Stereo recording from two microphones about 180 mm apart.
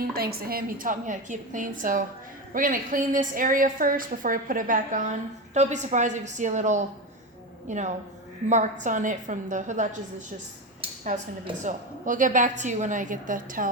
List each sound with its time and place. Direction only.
0.0 s a woman's voice: 60° right (ahead or behind); by 9.9 s 45° right (ahead or behind)
11.6 s a woman's voice: 45° right (ahead or behind)